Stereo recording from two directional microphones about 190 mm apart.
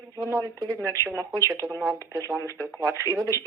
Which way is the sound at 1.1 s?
15° right (ahead or behind).